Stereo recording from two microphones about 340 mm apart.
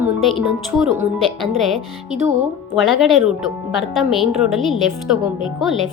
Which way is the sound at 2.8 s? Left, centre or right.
Centre.